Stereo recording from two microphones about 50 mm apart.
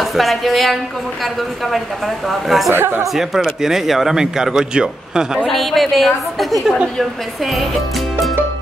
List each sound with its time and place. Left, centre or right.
0.0 s a woman's voice: centre
2.2 s a woman's voice: centre
2.7 s speech: right
3.2 s speech: centre
5.5 s a woman's voice: centre